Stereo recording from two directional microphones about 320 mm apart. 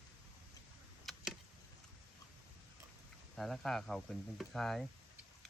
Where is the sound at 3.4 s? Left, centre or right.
Centre.